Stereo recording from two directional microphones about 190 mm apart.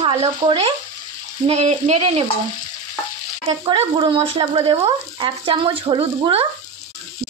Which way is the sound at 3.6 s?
25° right (ahead or behind).